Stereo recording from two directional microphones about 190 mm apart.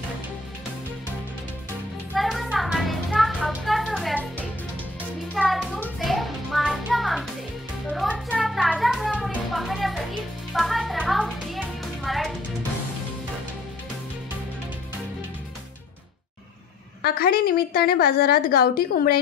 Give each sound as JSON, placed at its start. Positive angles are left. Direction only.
{"t": 2.1, "sound": "music", "side_deg": 0}
{"t": 5.3, "sound": "music", "side_deg": 0}
{"t": 17.0, "sound": "a woman's voice", "side_deg": 55}